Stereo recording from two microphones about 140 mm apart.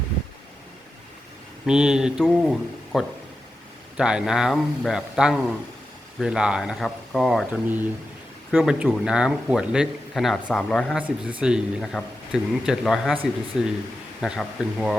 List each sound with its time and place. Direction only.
1.6 s speech: 5° right (ahead or behind)
11.2 s speech: 5° right (ahead or behind)